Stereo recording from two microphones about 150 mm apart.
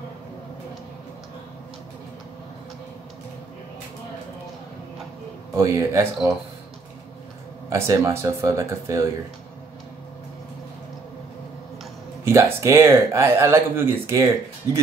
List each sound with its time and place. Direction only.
5.5 s speech: 20° right (ahead or behind)
7.7 s speech: 20° right (ahead or behind)
12.3 s speech: 20° right (ahead or behind)